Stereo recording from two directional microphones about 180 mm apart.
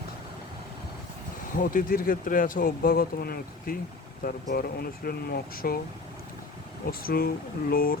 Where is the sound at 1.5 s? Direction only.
50° left (ahead or behind).